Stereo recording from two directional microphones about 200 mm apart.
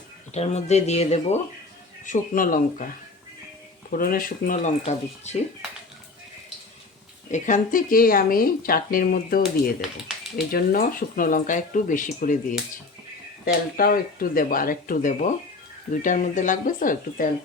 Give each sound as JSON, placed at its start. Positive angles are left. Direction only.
{"t": 0.3, "sound": "speech", "side_deg": 35}
{"t": 3.8, "sound": "speech", "side_deg": 45}
{"t": 7.3, "sound": "speech", "side_deg": 35}